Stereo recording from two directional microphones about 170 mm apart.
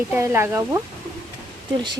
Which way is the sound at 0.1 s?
15° right (ahead or behind).